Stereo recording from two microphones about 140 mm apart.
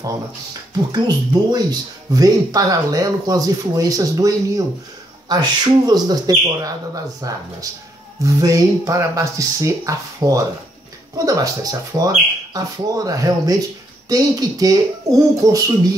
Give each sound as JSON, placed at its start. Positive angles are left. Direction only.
{"t": 0.0, "sound": "speech", "side_deg": -25}